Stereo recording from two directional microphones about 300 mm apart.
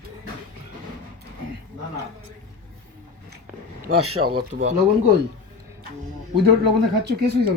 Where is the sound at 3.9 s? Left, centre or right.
Right.